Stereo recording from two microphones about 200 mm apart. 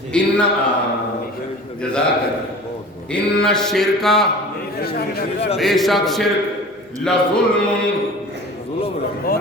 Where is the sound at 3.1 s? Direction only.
5° left (ahead or behind).